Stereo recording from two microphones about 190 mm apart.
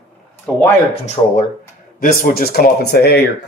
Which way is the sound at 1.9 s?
50° left (ahead or behind).